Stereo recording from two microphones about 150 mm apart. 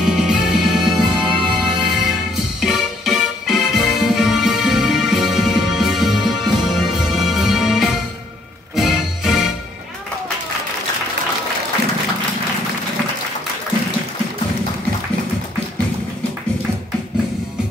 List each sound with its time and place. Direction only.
0.0 s music: 5° right (ahead or behind)